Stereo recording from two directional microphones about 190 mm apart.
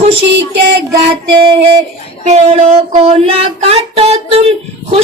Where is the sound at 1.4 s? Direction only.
30° right (ahead or behind).